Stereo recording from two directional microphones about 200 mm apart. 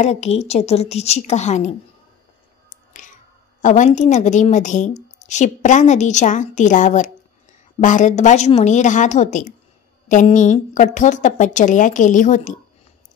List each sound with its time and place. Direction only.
0.0 s a woman's voice: 35° left (ahead or behind)
3.6 s a woman's voice: 40° left (ahead or behind)